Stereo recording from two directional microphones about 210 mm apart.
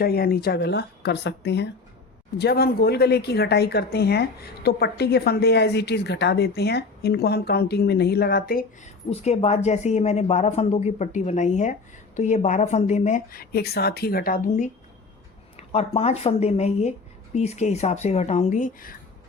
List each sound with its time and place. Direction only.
0.0 s a woman's voice: 45° left (ahead or behind)
9.0 s speech: 30° left (ahead or behind)